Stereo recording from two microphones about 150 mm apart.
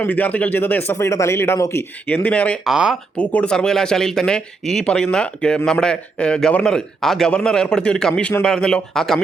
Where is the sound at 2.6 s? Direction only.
5° right (ahead or behind).